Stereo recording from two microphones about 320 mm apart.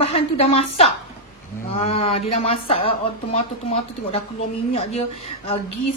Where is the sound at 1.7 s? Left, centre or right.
Centre.